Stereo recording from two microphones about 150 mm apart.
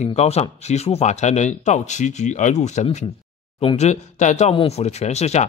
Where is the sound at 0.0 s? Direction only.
45° left (ahead or behind).